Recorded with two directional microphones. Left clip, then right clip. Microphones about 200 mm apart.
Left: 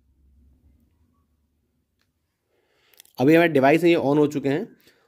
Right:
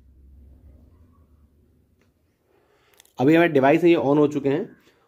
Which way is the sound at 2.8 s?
30° left (ahead or behind).